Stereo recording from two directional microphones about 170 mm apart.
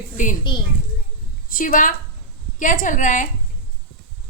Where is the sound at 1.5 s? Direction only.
55° left (ahead or behind).